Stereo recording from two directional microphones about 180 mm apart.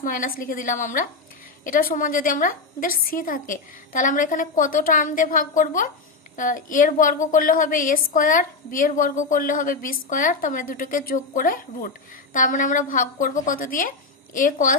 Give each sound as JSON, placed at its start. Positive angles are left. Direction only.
{"t": 0.0, "sound": "a woman's voice", "side_deg": 50}